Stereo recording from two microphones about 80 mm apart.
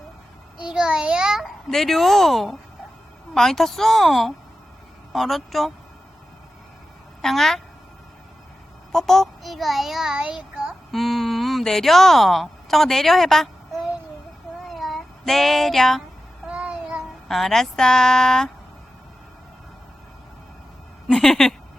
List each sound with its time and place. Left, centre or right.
0.6 s a child's voice: centre
1.7 s a child's voice: centre
7.2 s a child's voice: centre
8.9 s a child's voice: centre
10.9 s speech: centre
14.7 s cat: centre
16.5 s child singing: centre
17.2 s a woman's voice: centre
21.1 s a child's voice: centre